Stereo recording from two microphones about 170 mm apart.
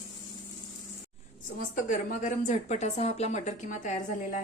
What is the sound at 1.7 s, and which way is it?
A woman's voice, 50° left (ahead or behind).